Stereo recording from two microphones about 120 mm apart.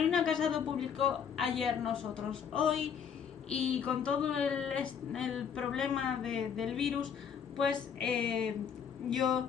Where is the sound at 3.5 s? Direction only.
10° left (ahead or behind).